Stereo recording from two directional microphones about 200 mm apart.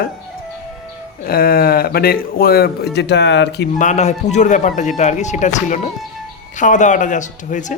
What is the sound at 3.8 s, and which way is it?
Speech, 35° left (ahead or behind).